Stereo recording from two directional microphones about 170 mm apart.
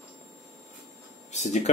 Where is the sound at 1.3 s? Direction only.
45° left (ahead or behind).